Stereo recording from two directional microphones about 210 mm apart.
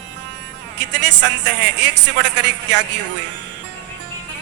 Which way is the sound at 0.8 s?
55° right (ahead or behind).